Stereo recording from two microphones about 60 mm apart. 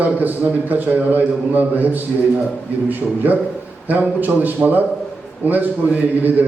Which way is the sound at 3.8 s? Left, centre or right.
Right.